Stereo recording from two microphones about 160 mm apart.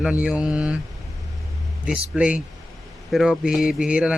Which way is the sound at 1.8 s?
5° right (ahead or behind).